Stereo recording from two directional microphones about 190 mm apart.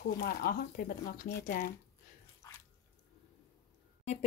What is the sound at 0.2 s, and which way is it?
Speech, 55° left (ahead or behind).